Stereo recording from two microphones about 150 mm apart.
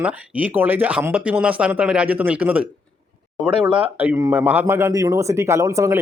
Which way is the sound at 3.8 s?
10° right (ahead or behind).